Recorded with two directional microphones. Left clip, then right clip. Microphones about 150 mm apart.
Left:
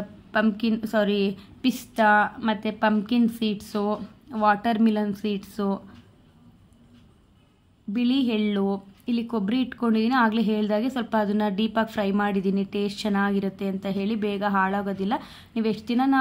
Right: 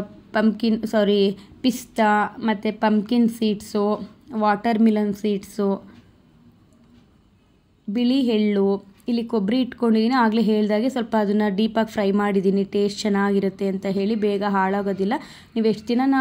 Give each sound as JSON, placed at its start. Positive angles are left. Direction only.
{"t": 0.3, "sound": "a woman's voice", "side_deg": -20}
{"t": 7.9, "sound": "a woman's voice", "side_deg": -20}